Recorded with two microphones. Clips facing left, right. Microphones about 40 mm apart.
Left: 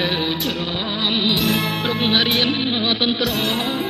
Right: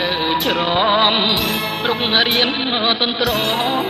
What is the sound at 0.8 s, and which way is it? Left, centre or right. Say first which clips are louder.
Music: right 12 dB; right.